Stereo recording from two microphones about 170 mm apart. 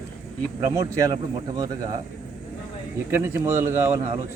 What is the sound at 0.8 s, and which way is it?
Speech, 20° right (ahead or behind).